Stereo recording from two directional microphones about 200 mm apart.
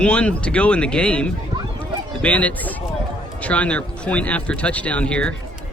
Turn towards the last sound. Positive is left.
turn(degrees=5)  # may be behind; listen again after turning